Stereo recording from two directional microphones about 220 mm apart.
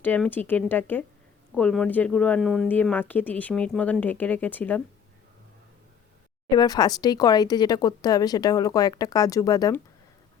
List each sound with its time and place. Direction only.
0.0 s speech: 10° left (ahead or behind)
6.5 s speech: 20° left (ahead or behind)